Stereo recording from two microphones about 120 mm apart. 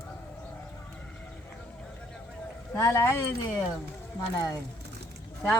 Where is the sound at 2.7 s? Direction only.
25° left (ahead or behind).